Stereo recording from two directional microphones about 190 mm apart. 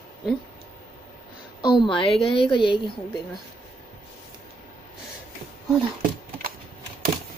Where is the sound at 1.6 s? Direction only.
25° left (ahead or behind).